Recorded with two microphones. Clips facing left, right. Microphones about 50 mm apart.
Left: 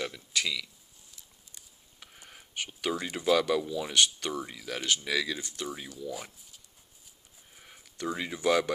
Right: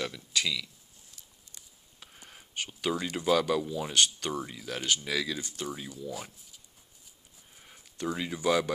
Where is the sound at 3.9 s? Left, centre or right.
Left.